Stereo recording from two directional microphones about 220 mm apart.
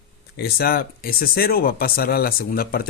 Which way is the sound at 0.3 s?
45° left (ahead or behind).